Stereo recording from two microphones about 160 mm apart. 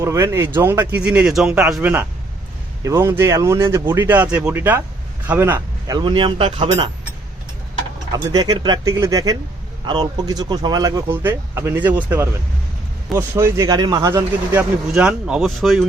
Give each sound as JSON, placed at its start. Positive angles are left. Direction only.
{"t": 0.0, "sound": "speech", "side_deg": -20}
{"t": 6.0, "sound": "speech", "side_deg": -30}
{"t": 8.3, "sound": "speech", "side_deg": -30}
{"t": 14.5, "sound": "speech", "side_deg": -5}